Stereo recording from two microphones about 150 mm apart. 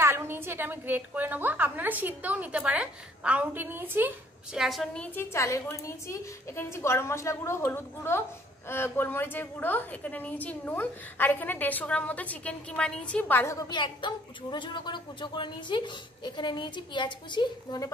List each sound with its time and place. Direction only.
0.0 s a woman's voice: 15° right (ahead or behind)
4.6 s a woman's voice: centre (ahead or behind); by 17.9 s 25° left (ahead or behind)